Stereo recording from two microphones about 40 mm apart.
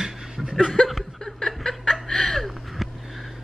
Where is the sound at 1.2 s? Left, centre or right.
Centre.